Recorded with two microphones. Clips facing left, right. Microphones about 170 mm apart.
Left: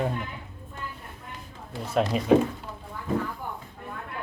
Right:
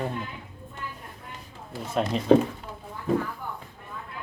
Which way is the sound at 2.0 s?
10° left (ahead or behind).